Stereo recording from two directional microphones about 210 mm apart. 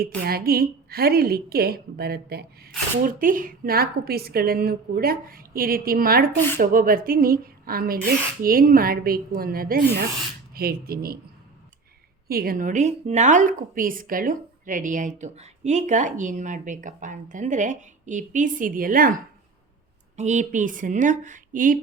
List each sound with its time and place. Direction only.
0.2 s speech: 45° right (ahead or behind)
12.3 s a woman's voice: 45° right (ahead or behind)